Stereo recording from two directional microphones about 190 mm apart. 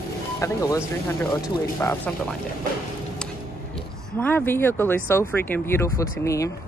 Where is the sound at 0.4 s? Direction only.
15° left (ahead or behind).